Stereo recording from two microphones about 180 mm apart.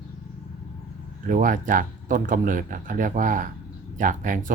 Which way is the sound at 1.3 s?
50° right (ahead or behind).